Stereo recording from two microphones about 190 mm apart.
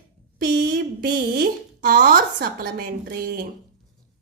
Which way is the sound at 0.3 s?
45° right (ahead or behind).